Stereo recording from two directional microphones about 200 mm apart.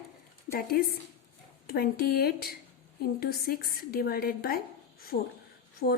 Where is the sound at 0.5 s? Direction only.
50° left (ahead or behind).